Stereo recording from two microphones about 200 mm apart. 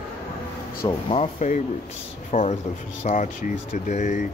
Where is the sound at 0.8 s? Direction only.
30° left (ahead or behind).